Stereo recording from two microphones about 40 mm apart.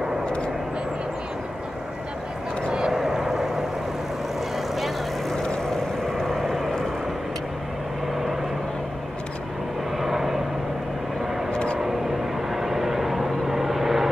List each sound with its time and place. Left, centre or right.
2.7 s vehicle: centre
6.1 s vehicle: centre
9.9 s vehicle: centre
11.5 s vehicle: left
12.4 s vehicle: centre